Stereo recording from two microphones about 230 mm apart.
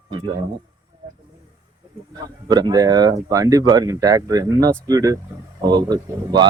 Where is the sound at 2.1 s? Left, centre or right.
Centre.